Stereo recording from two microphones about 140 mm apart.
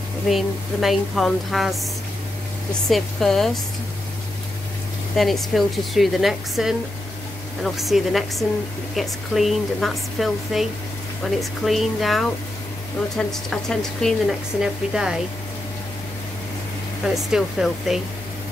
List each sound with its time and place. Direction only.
0.3 s speech: centre (ahead or behind)
2.9 s speech: centre (ahead or behind)
5.1 s speech: centre (ahead or behind)
17.3 s speech: centre (ahead or behind)